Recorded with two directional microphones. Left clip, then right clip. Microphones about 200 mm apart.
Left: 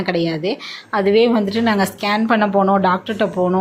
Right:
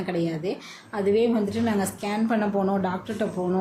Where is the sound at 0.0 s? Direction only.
15° left (ahead or behind).